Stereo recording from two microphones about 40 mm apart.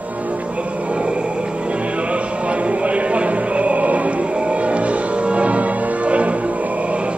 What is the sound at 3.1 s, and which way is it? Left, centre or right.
Music, right.